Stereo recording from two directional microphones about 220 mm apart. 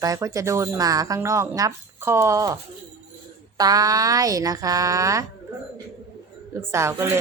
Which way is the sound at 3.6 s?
15° right (ahead or behind).